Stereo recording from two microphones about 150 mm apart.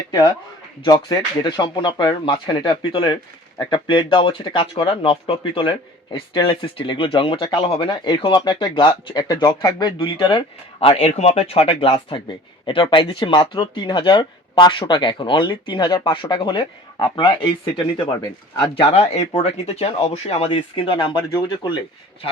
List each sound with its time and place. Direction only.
0.9 s speech: 25° left (ahead or behind)